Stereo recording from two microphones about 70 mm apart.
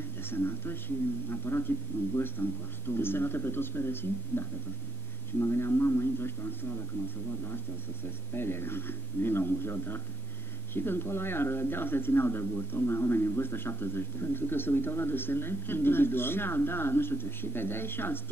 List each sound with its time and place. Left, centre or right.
0.2 s speech: left